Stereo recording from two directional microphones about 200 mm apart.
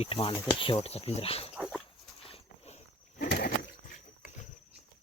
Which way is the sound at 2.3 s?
30° left (ahead or behind).